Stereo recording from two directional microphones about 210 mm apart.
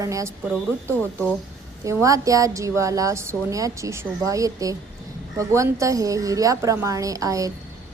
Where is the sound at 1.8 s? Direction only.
15° right (ahead or behind).